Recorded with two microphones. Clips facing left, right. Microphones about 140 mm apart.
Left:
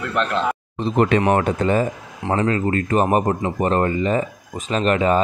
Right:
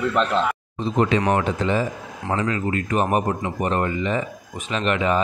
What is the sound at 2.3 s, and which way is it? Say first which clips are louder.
Speech: left 4 dB; 35° left (ahead or behind).